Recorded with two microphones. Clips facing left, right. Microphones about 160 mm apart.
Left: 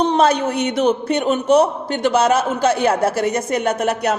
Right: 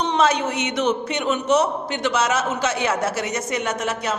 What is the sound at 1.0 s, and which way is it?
A man's voice, 50° left (ahead or behind).